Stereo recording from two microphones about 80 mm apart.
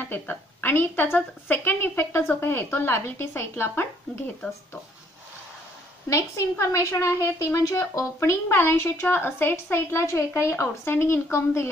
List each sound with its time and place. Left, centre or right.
0.0 s a woman's voice: left
6.0 s a woman's voice: left